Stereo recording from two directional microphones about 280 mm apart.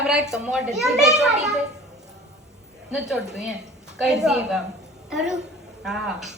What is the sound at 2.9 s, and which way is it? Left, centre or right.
A child's voice, centre.